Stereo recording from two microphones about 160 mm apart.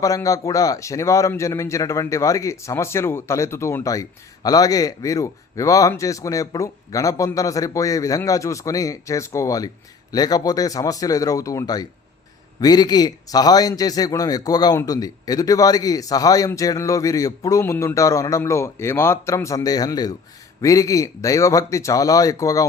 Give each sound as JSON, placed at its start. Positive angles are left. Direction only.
{"t": 0.0, "sound": "a man's voice", "side_deg": 20}